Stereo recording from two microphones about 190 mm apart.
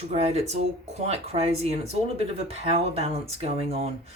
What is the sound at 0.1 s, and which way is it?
Speech, 35° right (ahead or behind).